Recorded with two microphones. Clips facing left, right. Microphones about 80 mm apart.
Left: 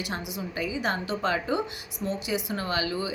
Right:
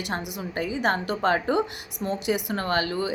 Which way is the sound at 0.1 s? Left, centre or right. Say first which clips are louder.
Right 3 dB; right.